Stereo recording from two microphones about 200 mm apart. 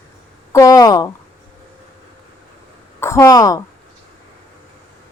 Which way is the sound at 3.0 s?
15° left (ahead or behind).